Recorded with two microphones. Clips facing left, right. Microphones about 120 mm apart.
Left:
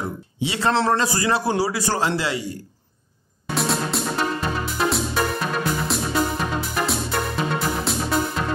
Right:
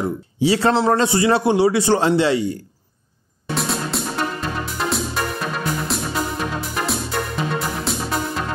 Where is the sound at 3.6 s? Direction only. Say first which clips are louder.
Left 1 dB; centre (ahead or behind).